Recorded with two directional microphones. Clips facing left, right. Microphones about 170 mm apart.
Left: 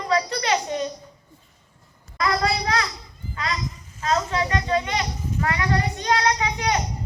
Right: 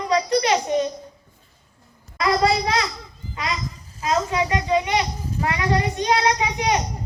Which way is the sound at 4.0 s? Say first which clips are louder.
Right 2 dB; 15° right (ahead or behind).